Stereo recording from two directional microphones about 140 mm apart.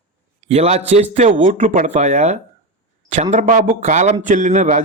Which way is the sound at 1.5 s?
70° right (ahead or behind).